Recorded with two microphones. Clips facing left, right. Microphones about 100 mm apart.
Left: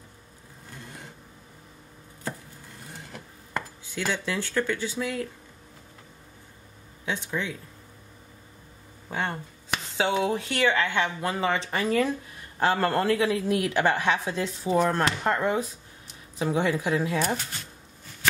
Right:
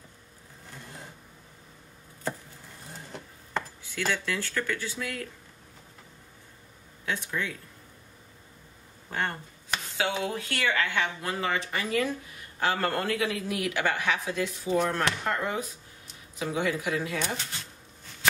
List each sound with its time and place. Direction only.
3.9 s speech: 15° left (ahead or behind)
7.1 s speech: 15° left (ahead or behind)
9.1 s speech: 10° left (ahead or behind)
9.9 s a woman's voice: 25° left (ahead or behind)